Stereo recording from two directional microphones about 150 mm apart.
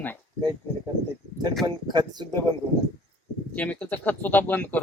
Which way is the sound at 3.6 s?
10° left (ahead or behind).